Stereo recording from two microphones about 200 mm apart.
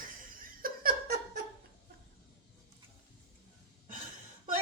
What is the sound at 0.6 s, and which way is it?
Laughter, 45° right (ahead or behind).